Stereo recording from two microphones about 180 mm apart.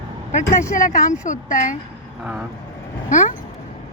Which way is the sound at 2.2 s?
5° right (ahead or behind).